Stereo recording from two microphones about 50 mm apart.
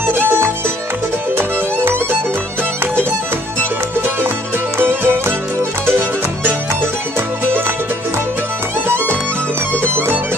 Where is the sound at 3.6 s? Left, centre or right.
Right.